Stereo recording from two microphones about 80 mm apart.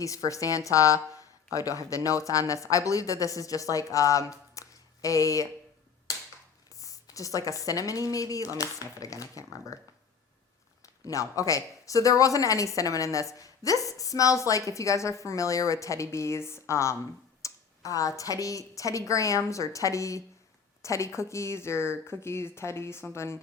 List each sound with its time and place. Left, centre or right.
0.0 s speech: left
6.7 s speech: left
10.8 s speech: left
17.4 s a sound: left
18.2 s speech: left